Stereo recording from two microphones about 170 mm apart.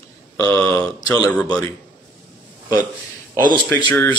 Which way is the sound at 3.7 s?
15° left (ahead or behind).